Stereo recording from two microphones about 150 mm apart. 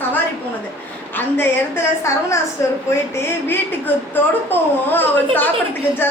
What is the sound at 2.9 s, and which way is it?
A woman's voice, 15° left (ahead or behind).